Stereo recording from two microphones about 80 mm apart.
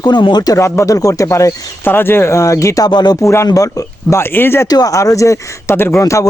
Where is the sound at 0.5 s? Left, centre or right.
Left.